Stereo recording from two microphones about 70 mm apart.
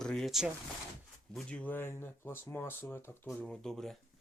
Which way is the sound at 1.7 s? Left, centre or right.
Left.